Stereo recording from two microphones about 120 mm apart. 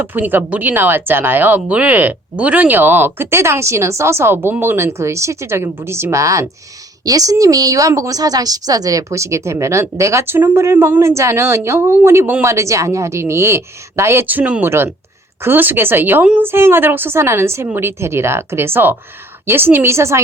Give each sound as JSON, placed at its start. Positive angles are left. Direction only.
{"t": 0.0, "sound": "speech", "side_deg": -15}